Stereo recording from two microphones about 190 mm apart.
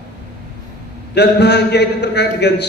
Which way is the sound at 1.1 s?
60° left (ahead or behind).